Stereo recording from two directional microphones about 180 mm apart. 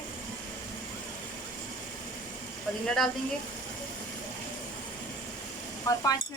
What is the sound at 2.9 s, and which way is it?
Speech, centre (ahead or behind).